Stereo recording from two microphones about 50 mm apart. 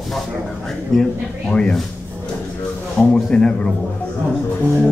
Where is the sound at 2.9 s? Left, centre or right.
Centre.